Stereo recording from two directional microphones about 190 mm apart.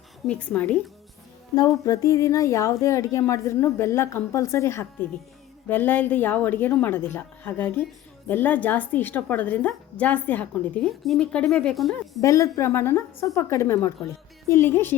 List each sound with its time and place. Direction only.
0.3 s a woman's voice: 5° left (ahead or behind)
1.5 s a woman's voice: 15° left (ahead or behind); by 12.2 s centre (ahead or behind)
12.2 s a woman's voice: 15° left (ahead or behind)